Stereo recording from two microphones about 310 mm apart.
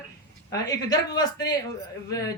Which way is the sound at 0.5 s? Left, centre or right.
Centre.